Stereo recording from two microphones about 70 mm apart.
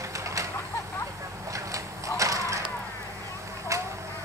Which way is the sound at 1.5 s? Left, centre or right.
Right.